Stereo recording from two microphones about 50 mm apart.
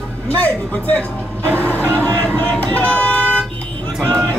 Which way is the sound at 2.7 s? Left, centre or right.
Left.